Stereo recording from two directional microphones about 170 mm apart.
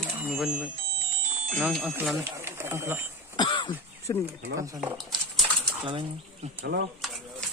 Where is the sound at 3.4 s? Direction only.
25° left (ahead or behind).